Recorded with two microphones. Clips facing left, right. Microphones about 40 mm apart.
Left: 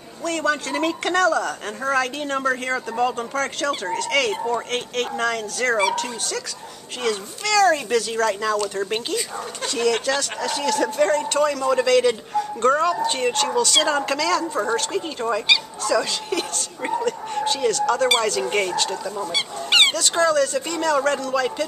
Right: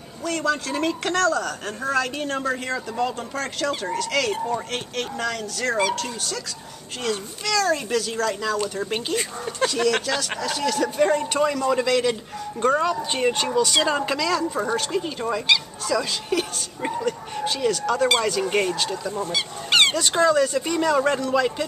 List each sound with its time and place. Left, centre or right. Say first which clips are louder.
0.5 s speech: left 1 dB; centre
1.8 s speech: left 2 dB; centre
5.7 s speech: left 2 dB; centre
11.1 s speech: left 1 dB; centre
19.3 s goose: left 2 dB; centre
20.0 s speech: even; centre